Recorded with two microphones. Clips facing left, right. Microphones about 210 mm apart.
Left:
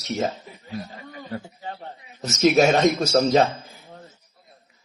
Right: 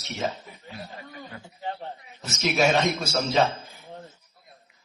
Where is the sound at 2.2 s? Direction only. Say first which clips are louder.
Left 7 dB; 45° left (ahead or behind).